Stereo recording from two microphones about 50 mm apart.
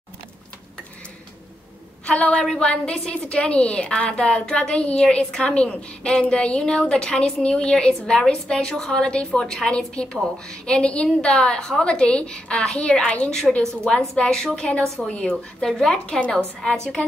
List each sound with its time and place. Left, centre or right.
2.0 s a woman's voice: centre